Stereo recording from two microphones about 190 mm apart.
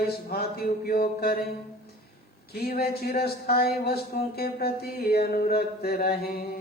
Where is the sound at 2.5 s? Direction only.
55° left (ahead or behind).